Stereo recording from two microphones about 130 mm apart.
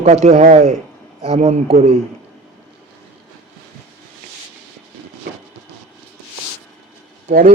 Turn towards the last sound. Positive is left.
turn(degrees=-70)  # may be behind; listen again after turning